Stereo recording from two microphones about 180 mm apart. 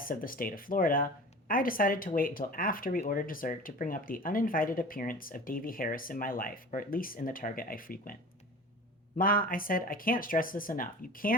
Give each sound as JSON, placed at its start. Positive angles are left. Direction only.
{"t": 0.0, "sound": "speech", "side_deg": 50}
{"t": 9.1, "sound": "speech", "side_deg": 50}